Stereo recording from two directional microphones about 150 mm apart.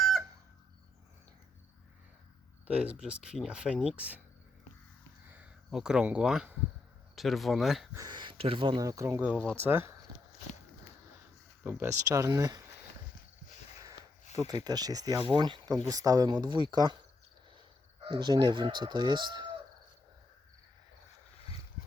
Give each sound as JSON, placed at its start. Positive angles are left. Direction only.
{"t": 2.6, "sound": "speech", "side_deg": -5}
{"t": 5.3, "sound": "speech", "side_deg": -5}
{"t": 7.9, "sound": "speech", "side_deg": -30}
{"t": 11.8, "sound": "speech", "side_deg": -20}
{"t": 14.3, "sound": "speech", "side_deg": -25}
{"t": 18.0, "sound": "speech", "side_deg": -30}